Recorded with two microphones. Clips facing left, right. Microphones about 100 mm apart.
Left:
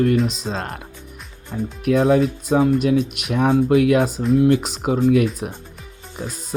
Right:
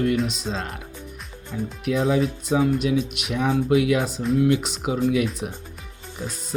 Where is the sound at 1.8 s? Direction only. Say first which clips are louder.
Left 5 dB; 60° left (ahead or behind).